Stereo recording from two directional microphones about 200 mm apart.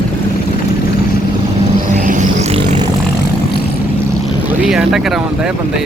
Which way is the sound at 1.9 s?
35° right (ahead or behind).